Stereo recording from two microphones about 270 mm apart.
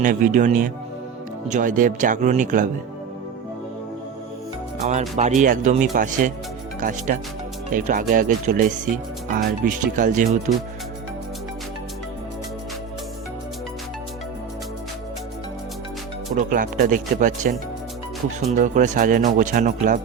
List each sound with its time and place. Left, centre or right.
0.0 s speech: right
4.9 s speech: right
16.3 s speech: right
18.5 s speech: right